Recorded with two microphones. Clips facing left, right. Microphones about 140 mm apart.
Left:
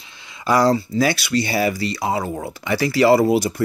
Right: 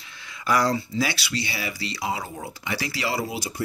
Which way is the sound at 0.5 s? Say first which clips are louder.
Left 6 dB; 35° left (ahead or behind).